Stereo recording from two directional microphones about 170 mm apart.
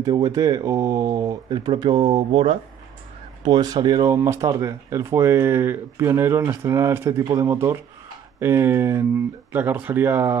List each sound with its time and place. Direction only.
0.0 s speech: 20° right (ahead or behind)